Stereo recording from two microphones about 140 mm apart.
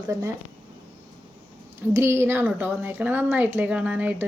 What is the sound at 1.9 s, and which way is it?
A woman's voice, 20° right (ahead or behind).